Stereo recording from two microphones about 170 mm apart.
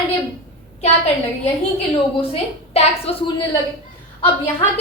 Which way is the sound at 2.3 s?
35° left (ahead or behind).